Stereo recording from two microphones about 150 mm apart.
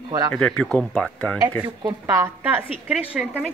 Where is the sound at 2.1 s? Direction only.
15° right (ahead or behind).